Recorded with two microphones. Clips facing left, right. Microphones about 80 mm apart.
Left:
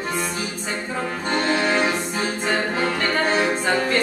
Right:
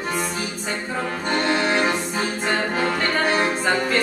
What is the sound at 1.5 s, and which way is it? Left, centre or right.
Music, centre.